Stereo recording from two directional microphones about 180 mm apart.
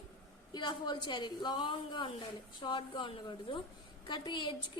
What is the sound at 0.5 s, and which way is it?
A woman's voice, 25° left (ahead or behind).